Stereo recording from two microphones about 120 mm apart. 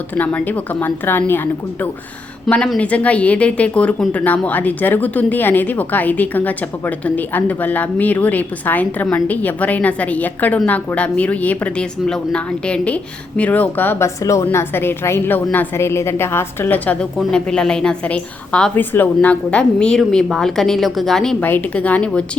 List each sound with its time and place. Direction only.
0.2 s speech: 15° left (ahead or behind)
14.2 s a woman's voice: 25° left (ahead or behind); by 21.3 s 5° left (ahead or behind)
21.4 s speech: 15° left (ahead or behind)